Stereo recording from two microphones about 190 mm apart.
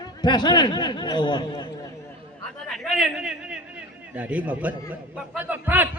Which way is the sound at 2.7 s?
Centre (ahead or behind).